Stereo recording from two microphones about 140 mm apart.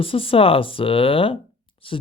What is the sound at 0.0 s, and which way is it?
Speech, 40° left (ahead or behind).